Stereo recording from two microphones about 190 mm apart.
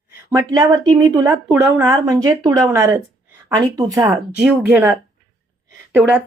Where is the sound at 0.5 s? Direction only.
20° right (ahead or behind).